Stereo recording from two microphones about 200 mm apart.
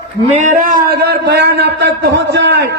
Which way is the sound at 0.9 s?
55° right (ahead or behind).